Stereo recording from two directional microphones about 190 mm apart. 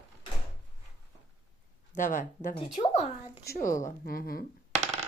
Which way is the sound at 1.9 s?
40° left (ahead or behind).